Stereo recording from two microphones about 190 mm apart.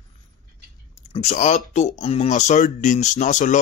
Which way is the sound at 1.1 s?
35° left (ahead or behind).